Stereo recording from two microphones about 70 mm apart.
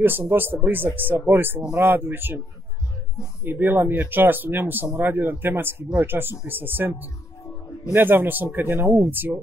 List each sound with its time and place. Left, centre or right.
0.0 s speech: right
3.4 s speech: right